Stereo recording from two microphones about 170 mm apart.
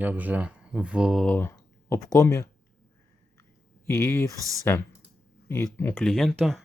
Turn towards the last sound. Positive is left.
turn(degrees=0)  # may be behind; listen again after turning